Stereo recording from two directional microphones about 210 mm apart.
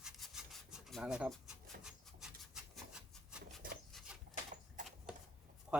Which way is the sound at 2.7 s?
5° right (ahead or behind).